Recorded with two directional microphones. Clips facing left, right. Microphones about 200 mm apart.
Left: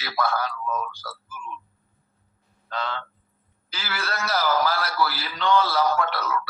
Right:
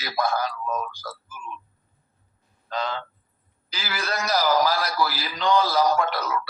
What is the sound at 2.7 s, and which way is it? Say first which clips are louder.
A man's voice: right 2 dB; 15° right (ahead or behind).